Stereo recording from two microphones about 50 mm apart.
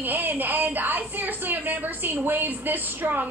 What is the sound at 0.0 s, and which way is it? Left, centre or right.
A woman's voice, right.